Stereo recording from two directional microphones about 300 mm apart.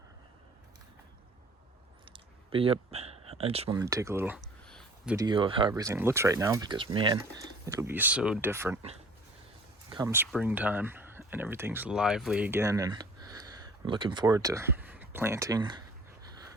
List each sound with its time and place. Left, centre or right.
2.1 s speech: centre
4.6 s a sound: centre
5.1 s speech: centre
9.9 s speech: centre